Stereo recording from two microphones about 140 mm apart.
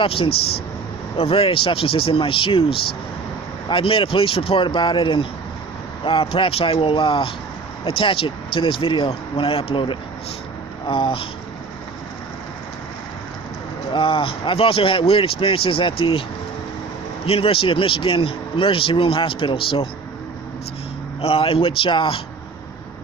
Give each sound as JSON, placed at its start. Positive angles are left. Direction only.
{"t": 0.0, "sound": "a man's voice", "side_deg": 40}
{"t": 13.9, "sound": "a man's voice", "side_deg": 40}
{"t": 17.2, "sound": "a man's voice", "side_deg": 45}
{"t": 21.2, "sound": "a man's voice", "side_deg": 40}